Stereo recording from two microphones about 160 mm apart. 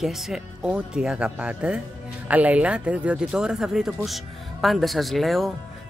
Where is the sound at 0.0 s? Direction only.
Centre (ahead or behind).